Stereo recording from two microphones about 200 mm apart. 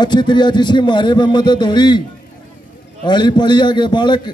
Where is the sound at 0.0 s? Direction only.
20° left (ahead or behind).